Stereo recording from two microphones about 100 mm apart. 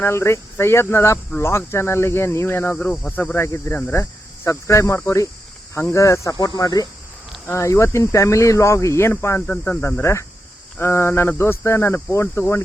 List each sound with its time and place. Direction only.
0.0 s speech: 25° left (ahead or behind)
6.3 s speech: 45° left (ahead or behind)
7.4 s speech: 25° left (ahead or behind)